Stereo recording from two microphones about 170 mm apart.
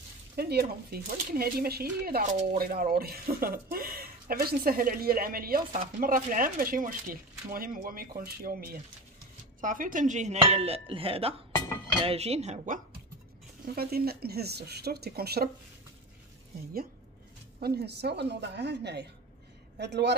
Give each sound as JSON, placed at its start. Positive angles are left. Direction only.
{"t": 0.4, "sound": "speech", "side_deg": -70}
{"t": 9.6, "sound": "dishes", "side_deg": -50}
{"t": 13.7, "sound": "speech", "side_deg": -65}
{"t": 17.6, "sound": "a woman's voice", "side_deg": -70}